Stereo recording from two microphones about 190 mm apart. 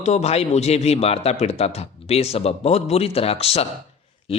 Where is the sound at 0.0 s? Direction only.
35° left (ahead or behind).